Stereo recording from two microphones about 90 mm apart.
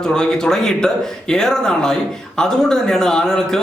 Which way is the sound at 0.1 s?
5° left (ahead or behind).